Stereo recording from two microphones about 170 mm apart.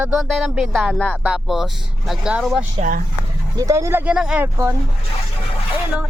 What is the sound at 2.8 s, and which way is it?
Speech, 55° right (ahead or behind).